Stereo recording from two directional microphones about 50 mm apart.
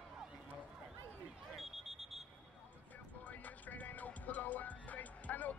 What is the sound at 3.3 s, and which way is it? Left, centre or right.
Music, left.